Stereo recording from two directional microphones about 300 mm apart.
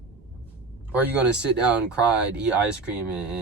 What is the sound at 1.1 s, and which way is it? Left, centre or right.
Speech, centre.